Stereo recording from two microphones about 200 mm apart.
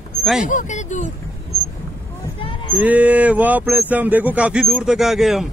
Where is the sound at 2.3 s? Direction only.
25° left (ahead or behind).